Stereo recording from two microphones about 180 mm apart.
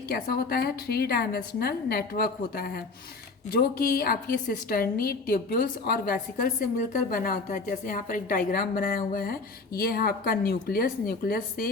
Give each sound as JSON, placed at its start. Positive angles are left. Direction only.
{"t": 0.1, "sound": "a woman's voice", "side_deg": 60}